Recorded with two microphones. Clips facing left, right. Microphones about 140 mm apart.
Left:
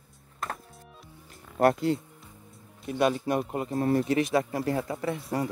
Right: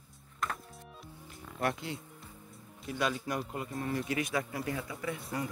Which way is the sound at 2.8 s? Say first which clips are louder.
Left 8 dB; 30° left (ahead or behind).